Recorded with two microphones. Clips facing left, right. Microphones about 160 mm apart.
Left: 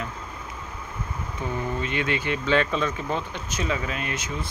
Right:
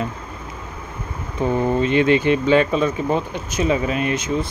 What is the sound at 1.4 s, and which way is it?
Speech, 55° right (ahead or behind).